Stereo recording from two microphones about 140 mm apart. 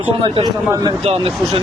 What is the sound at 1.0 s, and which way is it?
Speech, 45° right (ahead or behind).